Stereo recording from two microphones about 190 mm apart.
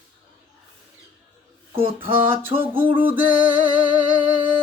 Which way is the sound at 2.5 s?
10° right (ahead or behind).